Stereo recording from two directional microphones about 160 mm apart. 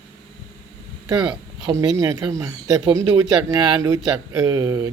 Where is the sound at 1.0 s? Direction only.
25° right (ahead or behind).